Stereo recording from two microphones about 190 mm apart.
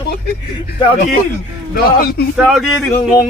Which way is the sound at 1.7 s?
55° left (ahead or behind).